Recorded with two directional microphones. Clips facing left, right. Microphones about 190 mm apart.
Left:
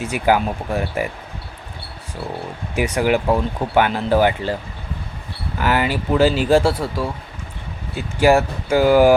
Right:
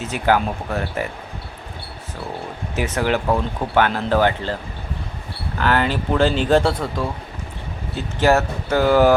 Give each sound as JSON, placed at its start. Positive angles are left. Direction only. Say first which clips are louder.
{"t": 0.0, "sound": "speech", "louder": "left 1 dB", "side_deg": 10}
{"t": 2.7, "sound": "speech", "louder": "left 3 dB", "side_deg": 15}
{"t": 5.5, "sound": "speech", "louder": "even", "side_deg": 10}